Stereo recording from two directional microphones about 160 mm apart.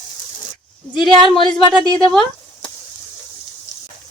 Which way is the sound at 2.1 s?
Centre (ahead or behind).